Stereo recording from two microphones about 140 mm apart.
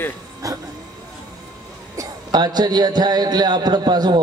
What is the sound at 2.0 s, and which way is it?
A man's voice, 30° right (ahead or behind).